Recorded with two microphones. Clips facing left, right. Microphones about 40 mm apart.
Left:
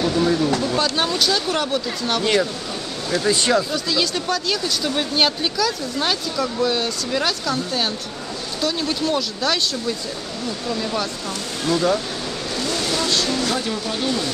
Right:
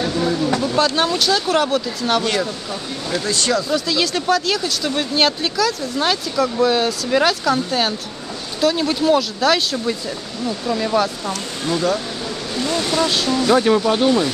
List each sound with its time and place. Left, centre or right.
0.1 s speech: centre
3.3 s speech: centre
3.7 s speech: centre
11.6 s speech: centre
12.5 s speech: centre
13.5 s speech: right